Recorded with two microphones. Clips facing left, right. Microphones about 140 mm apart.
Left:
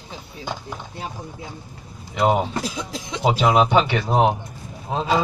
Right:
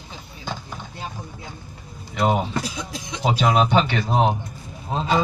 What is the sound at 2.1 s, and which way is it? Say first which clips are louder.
A man's voice: left 2 dB; 5° left (ahead or behind).